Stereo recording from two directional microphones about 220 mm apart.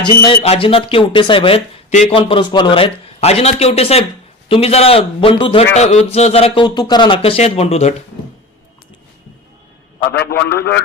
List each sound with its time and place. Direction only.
0.0 s speech: 20° left (ahead or behind)
10.1 s a man's voice: 50° left (ahead or behind)